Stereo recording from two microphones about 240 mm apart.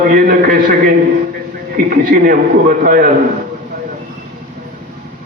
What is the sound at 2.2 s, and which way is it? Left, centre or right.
Speech, right.